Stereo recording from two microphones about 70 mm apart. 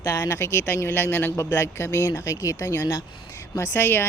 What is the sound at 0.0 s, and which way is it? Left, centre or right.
Speech, left.